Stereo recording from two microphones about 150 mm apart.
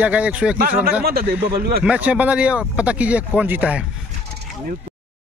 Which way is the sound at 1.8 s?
10° right (ahead or behind).